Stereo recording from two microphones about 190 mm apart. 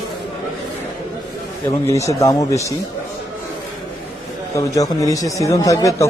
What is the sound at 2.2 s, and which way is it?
Speech, 15° left (ahead or behind).